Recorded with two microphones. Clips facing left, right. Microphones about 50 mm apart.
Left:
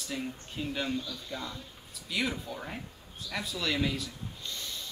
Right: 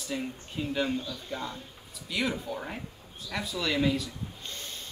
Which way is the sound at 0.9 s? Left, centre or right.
Right.